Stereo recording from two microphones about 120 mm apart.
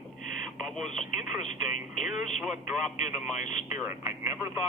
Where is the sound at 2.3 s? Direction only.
Centre (ahead or behind).